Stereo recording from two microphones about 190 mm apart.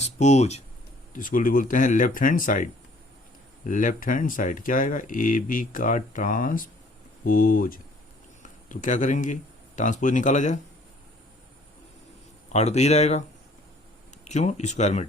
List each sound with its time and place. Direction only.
0.0 s speech: 35° left (ahead or behind)
12.5 s speech: 35° left (ahead or behind)
14.3 s speech: 35° left (ahead or behind)